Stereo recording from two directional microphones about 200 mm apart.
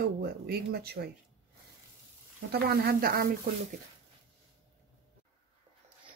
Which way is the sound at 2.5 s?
50° right (ahead or behind).